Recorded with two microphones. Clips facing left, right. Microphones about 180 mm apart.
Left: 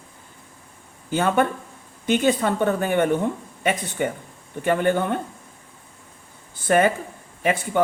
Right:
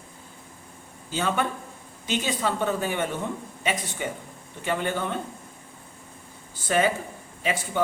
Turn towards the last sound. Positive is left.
turn(degrees=55)  # may be behind; listen again after turning